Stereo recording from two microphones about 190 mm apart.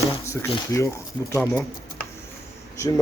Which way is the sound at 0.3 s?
15° left (ahead or behind).